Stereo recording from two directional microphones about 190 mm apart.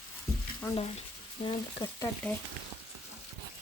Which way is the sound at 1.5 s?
20° left (ahead or behind).